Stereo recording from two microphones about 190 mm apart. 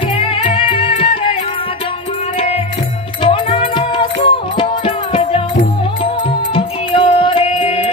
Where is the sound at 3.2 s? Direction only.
25° left (ahead or behind).